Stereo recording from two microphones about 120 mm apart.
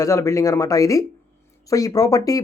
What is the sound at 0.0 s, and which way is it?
Speech, 25° left (ahead or behind).